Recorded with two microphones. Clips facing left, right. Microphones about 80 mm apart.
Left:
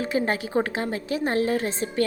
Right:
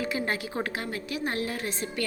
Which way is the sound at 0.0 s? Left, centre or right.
Left.